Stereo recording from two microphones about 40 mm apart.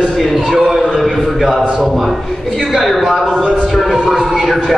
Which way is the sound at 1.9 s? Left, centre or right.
Centre.